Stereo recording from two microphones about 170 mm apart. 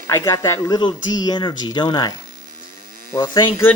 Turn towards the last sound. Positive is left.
turn(degrees=20)  # may be behind; listen again after turning